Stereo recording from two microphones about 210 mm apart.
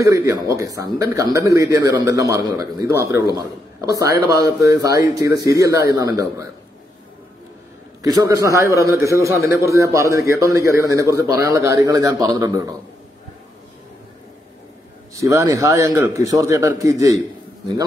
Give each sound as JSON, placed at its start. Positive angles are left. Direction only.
{"t": 0.0, "sound": "a man's voice", "side_deg": -15}
{"t": 8.0, "sound": "a man's voice", "side_deg": -15}
{"t": 15.1, "sound": "a man's voice", "side_deg": -15}